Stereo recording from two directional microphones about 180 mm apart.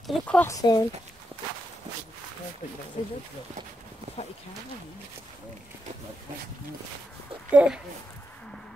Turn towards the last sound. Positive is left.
turn(degrees=-5)  # may be behind; listen again after turning